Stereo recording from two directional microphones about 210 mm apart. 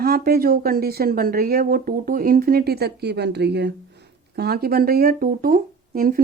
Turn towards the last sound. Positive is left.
turn(degrees=-45)  # may be behind; listen again after turning